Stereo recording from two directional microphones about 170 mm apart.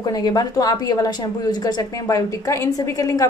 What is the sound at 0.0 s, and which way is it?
Speech, 25° left (ahead or behind).